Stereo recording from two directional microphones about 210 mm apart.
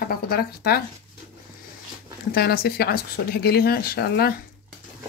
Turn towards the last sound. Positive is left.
turn(degrees=50)  # may be behind; listen again after turning